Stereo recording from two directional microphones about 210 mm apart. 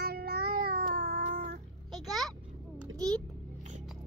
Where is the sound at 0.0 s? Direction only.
50° right (ahead or behind).